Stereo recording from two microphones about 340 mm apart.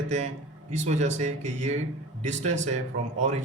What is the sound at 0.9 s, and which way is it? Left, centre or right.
Speech, centre.